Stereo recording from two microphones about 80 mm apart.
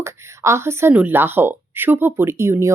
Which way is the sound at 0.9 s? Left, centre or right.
Right.